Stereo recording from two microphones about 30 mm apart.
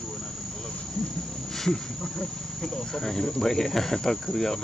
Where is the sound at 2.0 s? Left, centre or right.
Left.